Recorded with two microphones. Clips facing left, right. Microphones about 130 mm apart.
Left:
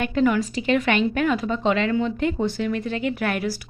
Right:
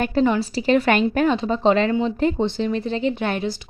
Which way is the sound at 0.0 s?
35° right (ahead or behind).